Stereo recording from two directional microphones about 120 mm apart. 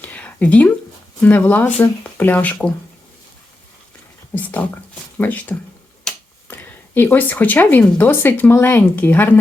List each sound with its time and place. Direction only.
0.0 s a sound: 10° left (ahead or behind)
1.2 s a woman's voice: 15° left (ahead or behind)
4.4 s speech: 15° left (ahead or behind)
6.1 s tick-tock: 5° left (ahead or behind)
6.5 s a woman's voice: 15° left (ahead or behind)